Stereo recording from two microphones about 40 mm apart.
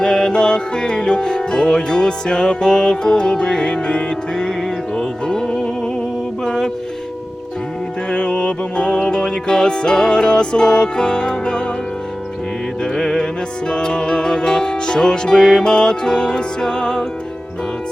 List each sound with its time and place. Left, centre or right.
0.0 s music: centre
8.1 s music: left
12.8 s music: centre